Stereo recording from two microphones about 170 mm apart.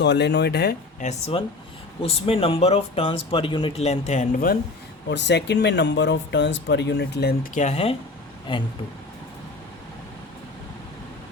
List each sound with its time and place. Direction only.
0.0 s speech: 90° left
0.9 s speech: 40° left (ahead or behind)
5.0 s speech: 90° left
7.5 s speech: 40° left (ahead or behind)